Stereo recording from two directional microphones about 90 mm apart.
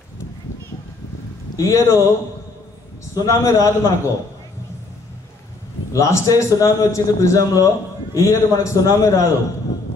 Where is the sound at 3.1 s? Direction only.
35° left (ahead or behind).